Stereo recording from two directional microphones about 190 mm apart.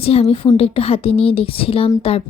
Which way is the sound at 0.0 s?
30° left (ahead or behind).